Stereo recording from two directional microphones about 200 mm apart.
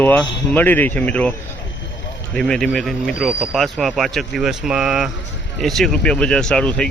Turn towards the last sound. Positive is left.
turn(degrees=5)  # may be behind; listen again after turning